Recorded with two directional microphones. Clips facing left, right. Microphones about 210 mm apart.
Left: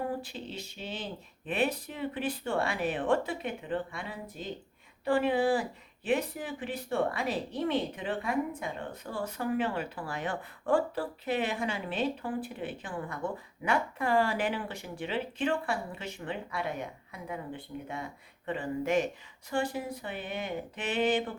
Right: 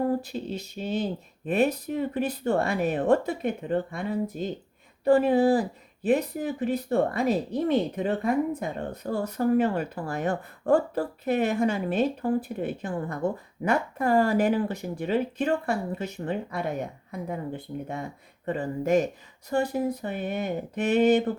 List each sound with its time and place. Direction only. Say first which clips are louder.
0.1 s speech: right 8 dB; 40° right (ahead or behind)